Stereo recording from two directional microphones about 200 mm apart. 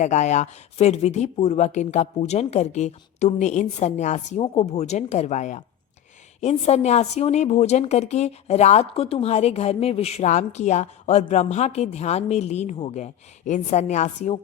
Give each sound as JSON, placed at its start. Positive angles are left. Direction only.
{"t": 0.0, "sound": "a woman's voice", "side_deg": 35}